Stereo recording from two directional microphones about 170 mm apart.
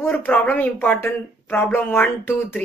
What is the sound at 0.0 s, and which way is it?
Speech, 10° left (ahead or behind).